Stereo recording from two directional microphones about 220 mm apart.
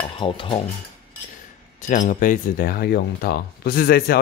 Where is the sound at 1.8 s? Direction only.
35° left (ahead or behind).